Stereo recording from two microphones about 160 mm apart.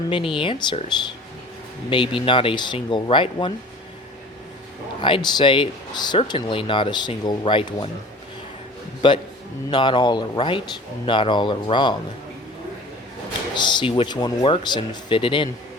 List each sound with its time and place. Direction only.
0.1 s speech: 30° left (ahead or behind)
1.9 s speech: 30° left (ahead or behind)
4.9 s speech: 30° left (ahead or behind)
9.0 s speech: 30° left (ahead or behind)
13.6 s speech: 30° left (ahead or behind)